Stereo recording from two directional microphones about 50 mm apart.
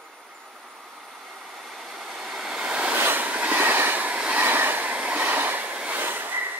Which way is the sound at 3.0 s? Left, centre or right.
Right.